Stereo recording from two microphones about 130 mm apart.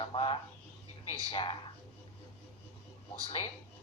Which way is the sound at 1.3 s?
40° left (ahead or behind).